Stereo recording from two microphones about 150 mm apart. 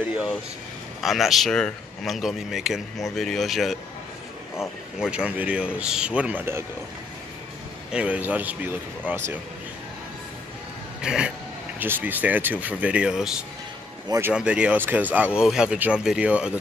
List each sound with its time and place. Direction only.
1.0 s speech: centre (ahead or behind)
5.0 s speech: 5° right (ahead or behind)
7.9 s speech: 10° right (ahead or behind)
11.0 s speech: 5° right (ahead or behind)
14.0 s a man's voice: 20° right (ahead or behind)
14.3 s speech: 5° right (ahead or behind)